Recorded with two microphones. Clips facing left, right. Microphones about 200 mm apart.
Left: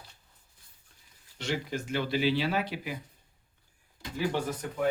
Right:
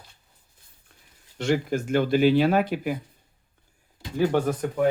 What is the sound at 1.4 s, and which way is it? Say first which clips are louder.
Speech: right 9 dB; 50° right (ahead or behind).